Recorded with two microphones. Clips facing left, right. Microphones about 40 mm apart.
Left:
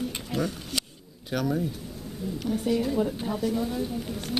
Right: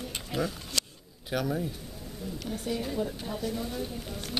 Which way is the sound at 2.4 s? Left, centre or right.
Centre.